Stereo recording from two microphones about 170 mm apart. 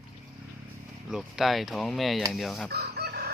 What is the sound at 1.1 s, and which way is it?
Speech, centre (ahead or behind).